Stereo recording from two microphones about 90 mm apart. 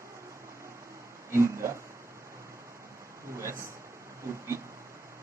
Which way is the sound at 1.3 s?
30° right (ahead or behind).